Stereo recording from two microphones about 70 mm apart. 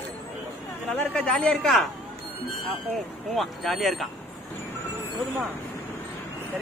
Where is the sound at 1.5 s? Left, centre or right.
Centre.